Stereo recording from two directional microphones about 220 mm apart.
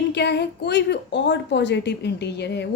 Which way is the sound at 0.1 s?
50° left (ahead or behind).